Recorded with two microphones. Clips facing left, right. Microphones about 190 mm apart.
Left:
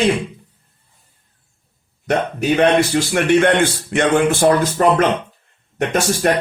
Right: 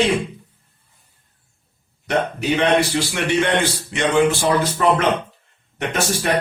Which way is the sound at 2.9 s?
55° left (ahead or behind).